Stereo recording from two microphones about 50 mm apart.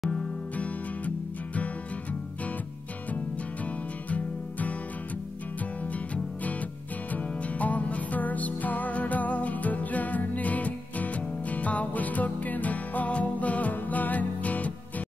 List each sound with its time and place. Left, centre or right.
0.6 s music: left
4.1 s music: left
5.9 s music: left